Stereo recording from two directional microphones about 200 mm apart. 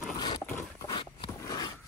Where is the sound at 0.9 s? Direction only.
25° left (ahead or behind).